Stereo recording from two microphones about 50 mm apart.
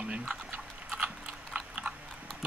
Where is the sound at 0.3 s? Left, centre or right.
Right.